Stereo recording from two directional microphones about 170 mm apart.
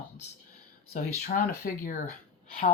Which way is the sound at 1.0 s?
55° left (ahead or behind).